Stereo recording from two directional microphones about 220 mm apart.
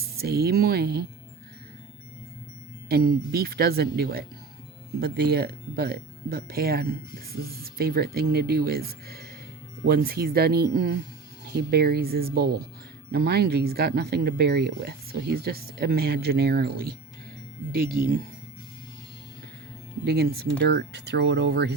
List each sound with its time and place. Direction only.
0.2 s speech: 45° right (ahead or behind)
2.9 s speech: 45° right (ahead or behind)
20.1 s speech: 45° right (ahead or behind)